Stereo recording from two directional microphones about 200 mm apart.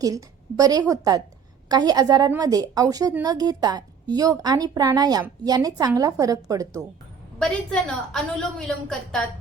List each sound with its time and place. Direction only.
0.0 s a woman's voice: 15° right (ahead or behind)
7.3 s a woman's voice: 5° left (ahead or behind)